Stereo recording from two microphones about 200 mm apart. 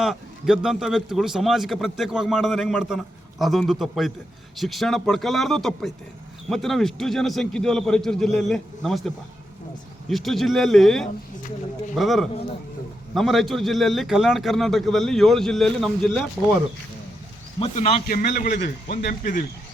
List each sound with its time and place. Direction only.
0.0 s a man's voice: centre (ahead or behind)
17.6 s a man's voice: 35° left (ahead or behind)